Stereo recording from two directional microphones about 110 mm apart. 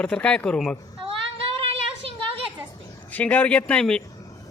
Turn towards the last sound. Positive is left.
turn(degrees=10)  # may be behind; listen again after turning